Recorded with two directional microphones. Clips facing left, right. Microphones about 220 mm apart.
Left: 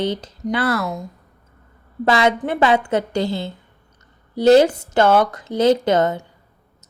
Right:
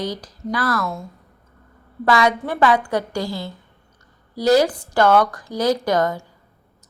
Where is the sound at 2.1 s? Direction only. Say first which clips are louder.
Left 1 dB; 25° left (ahead or behind).